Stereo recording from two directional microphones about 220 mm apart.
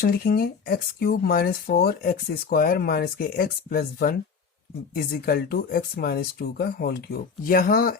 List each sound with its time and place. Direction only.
0.0 s speech: 45° left (ahead or behind)